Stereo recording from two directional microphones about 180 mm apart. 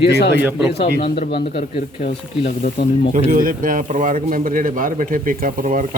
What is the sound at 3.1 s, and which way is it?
Speech, 50° right (ahead or behind).